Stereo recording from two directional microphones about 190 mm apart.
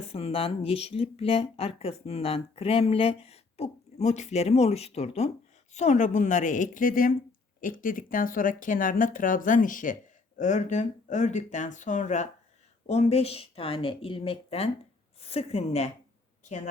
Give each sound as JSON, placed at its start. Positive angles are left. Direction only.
{"t": 0.1, "sound": "speech", "side_deg": 30}